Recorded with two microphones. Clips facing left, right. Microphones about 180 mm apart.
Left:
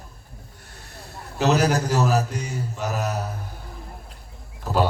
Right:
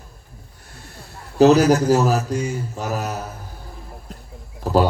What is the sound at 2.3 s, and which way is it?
Mantra, 35° right (ahead or behind).